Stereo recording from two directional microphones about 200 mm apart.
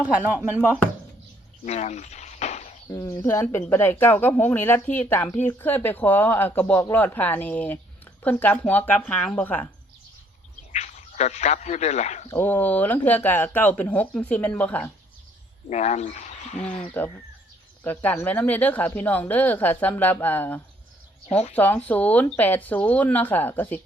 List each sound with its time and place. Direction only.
0.0 s speech: 5° right (ahead or behind)
1.6 s a sound: 35° left (ahead or behind)
2.9 s speech: 15° left (ahead or behind)
10.7 s speech: 35° left (ahead or behind)
12.3 s speech: 10° left (ahead or behind)
15.7 s speech: 35° left (ahead or behind)
17.8 s speech: 10° left (ahead or behind)